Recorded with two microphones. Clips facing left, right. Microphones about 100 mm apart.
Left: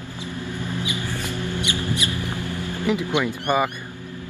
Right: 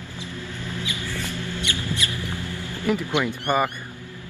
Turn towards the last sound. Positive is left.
turn(degrees=15)  # may be behind; listen again after turning